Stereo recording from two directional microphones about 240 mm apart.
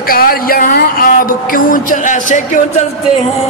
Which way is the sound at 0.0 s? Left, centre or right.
Left.